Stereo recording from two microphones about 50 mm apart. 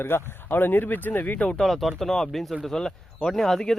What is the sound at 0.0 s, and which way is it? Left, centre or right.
Speech, left.